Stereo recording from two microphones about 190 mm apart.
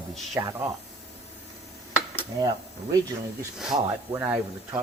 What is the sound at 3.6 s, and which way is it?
Speech, 5° right (ahead or behind).